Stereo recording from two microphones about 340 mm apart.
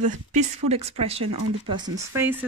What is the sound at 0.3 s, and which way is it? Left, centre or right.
Speech, centre.